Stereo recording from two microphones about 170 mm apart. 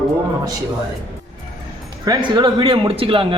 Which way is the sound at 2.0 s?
25° right (ahead or behind).